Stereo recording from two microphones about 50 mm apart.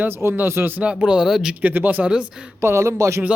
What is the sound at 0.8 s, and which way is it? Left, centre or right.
Speech, centre.